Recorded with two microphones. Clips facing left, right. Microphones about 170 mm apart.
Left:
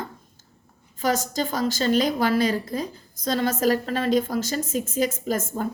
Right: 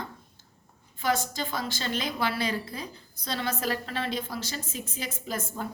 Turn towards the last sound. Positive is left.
turn(degrees=45)  # may be behind; listen again after turning